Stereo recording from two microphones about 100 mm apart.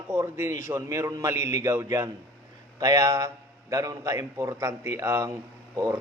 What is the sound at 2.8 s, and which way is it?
A man's voice, 35° right (ahead or behind).